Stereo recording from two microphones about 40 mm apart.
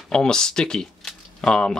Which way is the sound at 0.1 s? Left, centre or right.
Centre.